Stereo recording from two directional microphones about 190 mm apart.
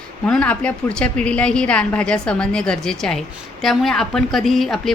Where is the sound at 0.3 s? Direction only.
5° left (ahead or behind).